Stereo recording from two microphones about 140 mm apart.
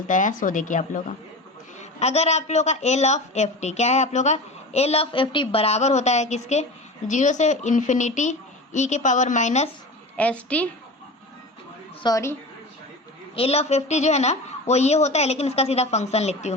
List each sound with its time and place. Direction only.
0.1 s speech: 65° left (ahead or behind)
1.8 s a woman's voice: 50° left (ahead or behind)
10.2 s a woman's voice: 10° left (ahead or behind)
12.0 s a woman's voice: 20° left (ahead or behind)
13.3 s a woman's voice: 45° left (ahead or behind)